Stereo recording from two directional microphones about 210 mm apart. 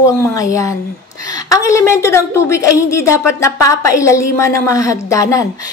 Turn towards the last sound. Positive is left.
turn(degrees=15)  # may be behind; listen again after turning